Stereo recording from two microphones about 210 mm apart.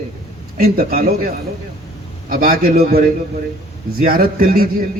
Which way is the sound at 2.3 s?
45° right (ahead or behind).